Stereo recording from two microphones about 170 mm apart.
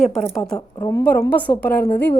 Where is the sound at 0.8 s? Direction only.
20° left (ahead or behind).